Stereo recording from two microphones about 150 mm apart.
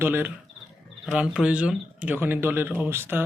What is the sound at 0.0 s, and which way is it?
Speech, 15° right (ahead or behind).